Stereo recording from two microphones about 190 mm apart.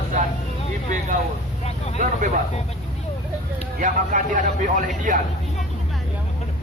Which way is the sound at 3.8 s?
40° right (ahead or behind).